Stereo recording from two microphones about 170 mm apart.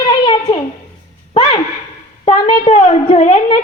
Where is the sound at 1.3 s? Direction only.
30° left (ahead or behind).